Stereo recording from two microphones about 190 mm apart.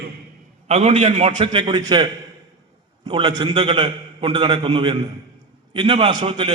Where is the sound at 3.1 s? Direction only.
25° right (ahead or behind).